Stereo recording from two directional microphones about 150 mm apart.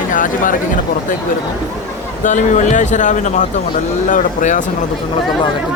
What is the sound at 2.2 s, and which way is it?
Speech, 55° left (ahead or behind).